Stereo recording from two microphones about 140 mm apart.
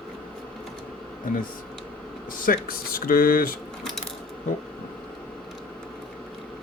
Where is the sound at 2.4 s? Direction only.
90° left.